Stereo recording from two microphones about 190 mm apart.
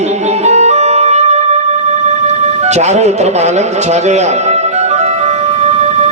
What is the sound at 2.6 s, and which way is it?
Music, 35° right (ahead or behind).